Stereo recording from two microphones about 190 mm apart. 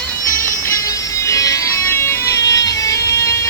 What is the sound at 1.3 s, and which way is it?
Music, 15° left (ahead or behind).